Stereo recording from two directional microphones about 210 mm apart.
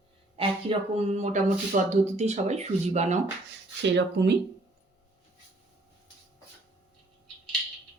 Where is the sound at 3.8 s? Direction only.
55° right (ahead or behind).